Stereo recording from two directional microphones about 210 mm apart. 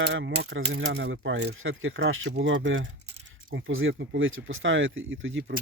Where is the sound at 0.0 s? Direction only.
60° right (ahead or behind).